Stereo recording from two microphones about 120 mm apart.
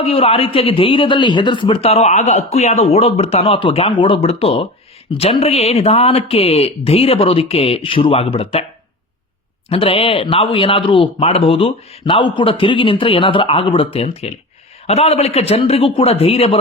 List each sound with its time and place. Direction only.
0.0 s a man's voice: 55° left (ahead or behind)
9.6 s a man's voice: 50° left (ahead or behind)